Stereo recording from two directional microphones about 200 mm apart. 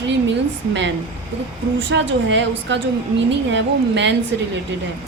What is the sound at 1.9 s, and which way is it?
Speech, 65° right (ahead or behind).